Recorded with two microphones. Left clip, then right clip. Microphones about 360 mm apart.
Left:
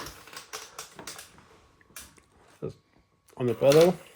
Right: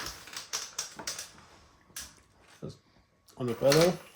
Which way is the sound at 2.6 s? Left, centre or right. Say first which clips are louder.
Left 8 dB; left.